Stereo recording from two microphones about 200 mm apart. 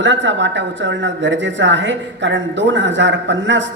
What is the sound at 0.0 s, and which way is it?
A man's voice, 65° right (ahead or behind).